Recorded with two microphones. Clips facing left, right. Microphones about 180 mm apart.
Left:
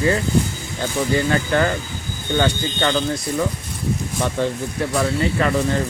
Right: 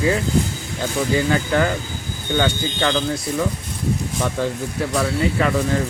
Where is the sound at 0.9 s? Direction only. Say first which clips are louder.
Even; 5° right (ahead or behind).